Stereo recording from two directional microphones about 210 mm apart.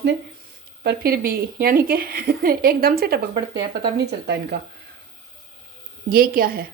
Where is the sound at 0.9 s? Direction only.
45° right (ahead or behind).